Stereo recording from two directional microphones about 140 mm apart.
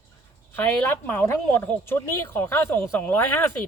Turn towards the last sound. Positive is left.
turn(degrees=15)  # may be behind; listen again after turning